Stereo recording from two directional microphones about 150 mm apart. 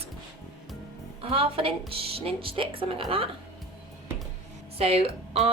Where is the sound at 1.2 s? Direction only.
40° right (ahead or behind).